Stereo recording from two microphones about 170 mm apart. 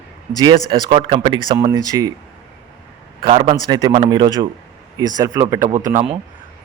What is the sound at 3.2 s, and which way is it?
Speech, 35° right (ahead or behind).